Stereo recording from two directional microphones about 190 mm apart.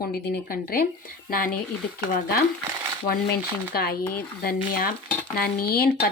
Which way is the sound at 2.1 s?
55° left (ahead or behind).